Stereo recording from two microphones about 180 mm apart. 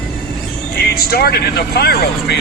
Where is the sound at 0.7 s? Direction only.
60° left (ahead or behind).